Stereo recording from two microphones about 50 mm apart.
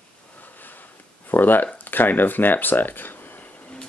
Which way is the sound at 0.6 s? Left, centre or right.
Left.